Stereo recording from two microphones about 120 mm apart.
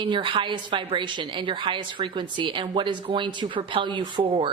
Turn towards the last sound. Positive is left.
turn(degrees=-45)  # may be behind; listen again after turning